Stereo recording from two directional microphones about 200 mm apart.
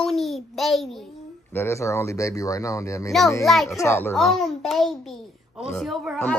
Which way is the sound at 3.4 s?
Centre (ahead or behind).